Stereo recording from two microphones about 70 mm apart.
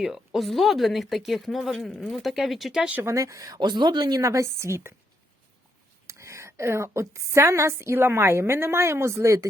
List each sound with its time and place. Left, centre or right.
0.3 s speech: centre
3.0 s speech: right
4.2 s a woman's voice: right
6.1 s a woman's voice: right